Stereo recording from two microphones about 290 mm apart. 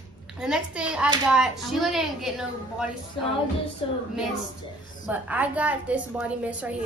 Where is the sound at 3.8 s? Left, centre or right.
Centre.